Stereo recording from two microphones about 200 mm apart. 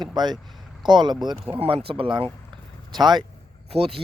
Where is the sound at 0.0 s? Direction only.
20° right (ahead or behind).